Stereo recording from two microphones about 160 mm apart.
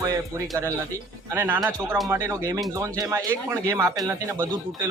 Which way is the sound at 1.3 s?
15° right (ahead or behind).